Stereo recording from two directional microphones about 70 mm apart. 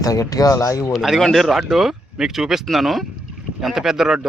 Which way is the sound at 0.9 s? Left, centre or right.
Centre.